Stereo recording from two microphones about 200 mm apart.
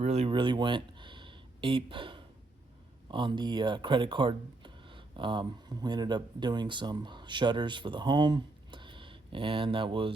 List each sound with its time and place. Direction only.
0.0 s speech: 35° right (ahead or behind)